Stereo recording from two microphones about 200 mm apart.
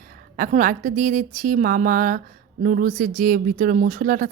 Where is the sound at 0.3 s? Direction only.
45° right (ahead or behind).